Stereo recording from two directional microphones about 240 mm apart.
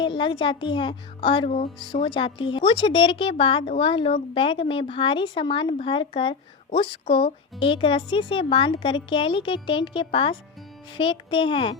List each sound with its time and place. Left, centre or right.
0.0 s a child's voice: centre